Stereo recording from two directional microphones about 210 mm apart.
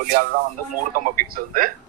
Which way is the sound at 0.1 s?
40° right (ahead or behind).